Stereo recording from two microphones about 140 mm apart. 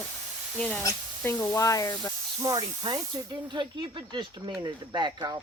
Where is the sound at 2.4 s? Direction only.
25° right (ahead or behind).